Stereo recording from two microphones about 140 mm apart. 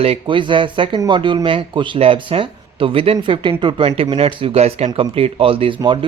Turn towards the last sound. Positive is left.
turn(degrees=-40)  # may be behind; listen again after turning